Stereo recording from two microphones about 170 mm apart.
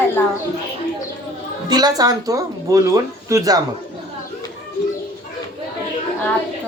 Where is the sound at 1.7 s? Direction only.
25° right (ahead or behind).